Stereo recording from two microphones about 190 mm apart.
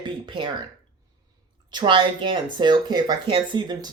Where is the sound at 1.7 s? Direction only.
25° right (ahead or behind).